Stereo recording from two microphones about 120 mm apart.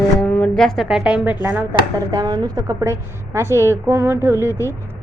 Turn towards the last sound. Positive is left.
turn(degrees=-20)  # may be behind; listen again after turning